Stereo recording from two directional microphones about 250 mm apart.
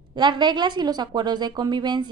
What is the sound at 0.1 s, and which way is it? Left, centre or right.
A woman's voice, centre.